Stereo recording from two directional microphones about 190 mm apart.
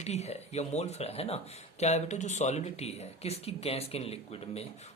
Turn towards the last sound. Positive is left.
turn(degrees=30)  # may be behind; listen again after turning